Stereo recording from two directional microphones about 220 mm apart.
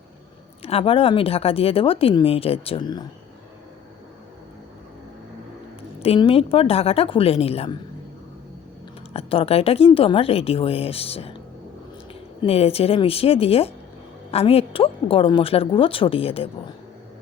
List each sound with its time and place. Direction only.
0.6 s speech: 25° left (ahead or behind)
6.0 s speech: 25° left (ahead or behind)
9.1 s speech: 25° left (ahead or behind)
12.4 s speech: 25° left (ahead or behind)